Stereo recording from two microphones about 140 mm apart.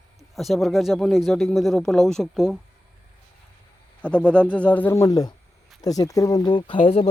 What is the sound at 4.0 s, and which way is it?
Speech, 10° left (ahead or behind).